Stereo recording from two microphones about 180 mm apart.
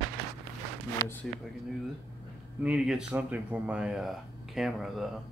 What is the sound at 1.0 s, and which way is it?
Speech, 20° left (ahead or behind).